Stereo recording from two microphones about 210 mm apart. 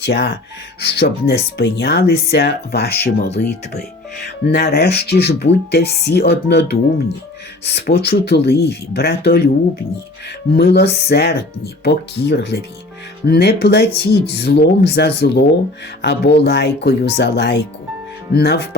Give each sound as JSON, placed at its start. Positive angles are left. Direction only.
{"t": 0.0, "sound": "speech", "side_deg": 50}
{"t": 10.5, "sound": "speech", "side_deg": 50}